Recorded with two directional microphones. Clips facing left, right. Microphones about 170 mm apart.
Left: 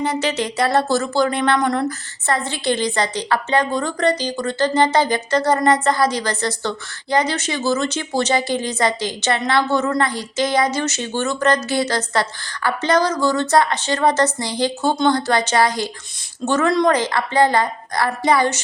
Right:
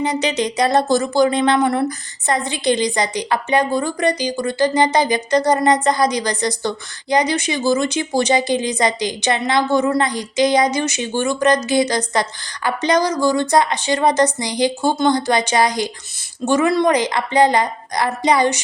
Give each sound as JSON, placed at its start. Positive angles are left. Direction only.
{"t": 0.0, "sound": "a woman's voice", "side_deg": -20}